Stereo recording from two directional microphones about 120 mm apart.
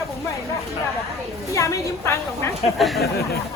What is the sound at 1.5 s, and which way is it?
Speech, 25° left (ahead or behind).